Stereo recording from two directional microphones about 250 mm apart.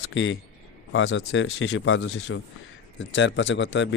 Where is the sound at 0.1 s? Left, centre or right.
Left.